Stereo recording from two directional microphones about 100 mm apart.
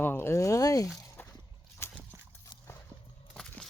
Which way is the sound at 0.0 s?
20° left (ahead or behind).